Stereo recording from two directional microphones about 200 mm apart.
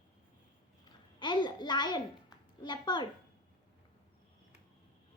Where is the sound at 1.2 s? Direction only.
25° left (ahead or behind).